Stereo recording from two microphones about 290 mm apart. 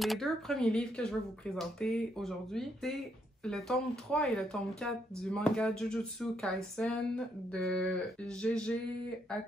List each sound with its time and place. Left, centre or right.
0.0 s speech: centre